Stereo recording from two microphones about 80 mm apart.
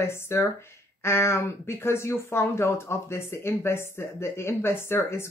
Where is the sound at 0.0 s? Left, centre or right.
Left.